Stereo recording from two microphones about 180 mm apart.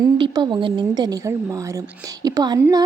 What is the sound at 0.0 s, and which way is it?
A woman's voice, 25° right (ahead or behind).